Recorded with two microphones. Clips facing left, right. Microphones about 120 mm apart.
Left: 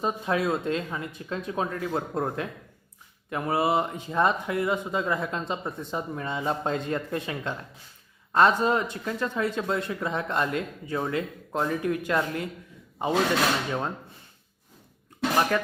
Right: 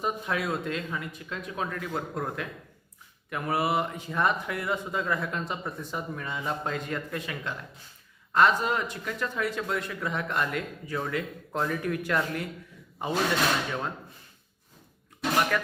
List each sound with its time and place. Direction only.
0.0 s speech: 25° left (ahead or behind)
15.5 s speech: 25° left (ahead or behind)